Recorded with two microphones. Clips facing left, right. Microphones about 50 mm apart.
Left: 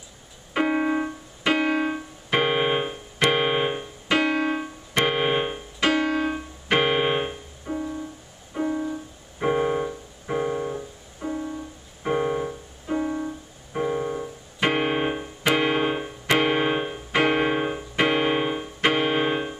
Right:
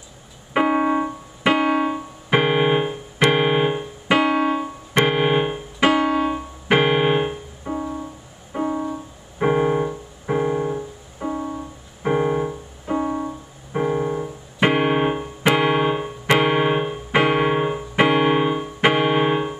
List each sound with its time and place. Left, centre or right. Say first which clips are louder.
0.5 s keyboard: right 4 dB; right
7.6 s music: right 2 dB; right
12.0 s music: right 4 dB; centre
13.7 s keyboard: right 4 dB; centre
16.3 s piano: right 4 dB; centre